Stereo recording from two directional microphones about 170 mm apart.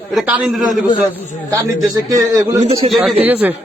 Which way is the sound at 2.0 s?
20° right (ahead or behind).